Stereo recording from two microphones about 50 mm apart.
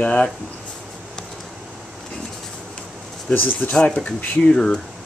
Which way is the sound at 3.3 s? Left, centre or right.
Left.